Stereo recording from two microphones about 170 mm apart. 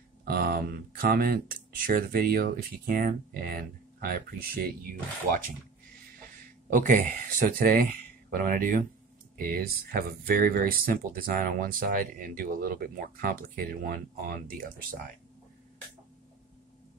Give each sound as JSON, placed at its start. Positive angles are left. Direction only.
{"t": 0.2, "sound": "speech", "side_deg": -65}
{"t": 6.7, "sound": "speech", "side_deg": -50}